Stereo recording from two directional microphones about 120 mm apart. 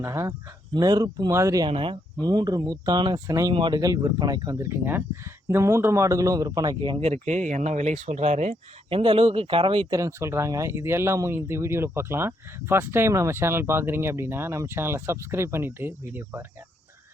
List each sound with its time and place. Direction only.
0.0 s speech: 25° right (ahead or behind)
1.6 s speech: 45° right (ahead or behind)
2.2 s speech: 35° right (ahead or behind)
3.5 s speech: 40° right (ahead or behind)
3.8 s speech: 30° right (ahead or behind)
7.0 s speech: 70° right (ahead or behind)
8.9 s speech: 50° right (ahead or behind)
9.9 s speech: 25° right (ahead or behind)